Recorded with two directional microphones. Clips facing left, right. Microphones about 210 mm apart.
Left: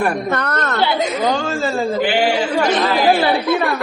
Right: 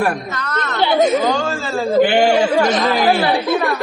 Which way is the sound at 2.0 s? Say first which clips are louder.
Right 7 dB; 50° right (ahead or behind).